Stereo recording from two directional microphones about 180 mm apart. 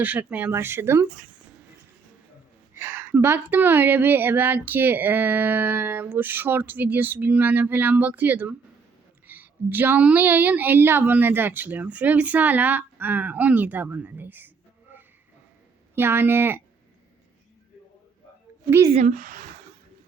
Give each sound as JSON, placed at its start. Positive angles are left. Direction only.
{"t": 0.0, "sound": "speech", "side_deg": -10}
{"t": 2.7, "sound": "speech", "side_deg": -10}
{"t": 16.0, "sound": "speech", "side_deg": -10}
{"t": 19.0, "sound": "speech", "side_deg": -50}